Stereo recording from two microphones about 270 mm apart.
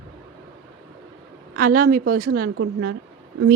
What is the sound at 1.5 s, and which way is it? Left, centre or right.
Speech, right.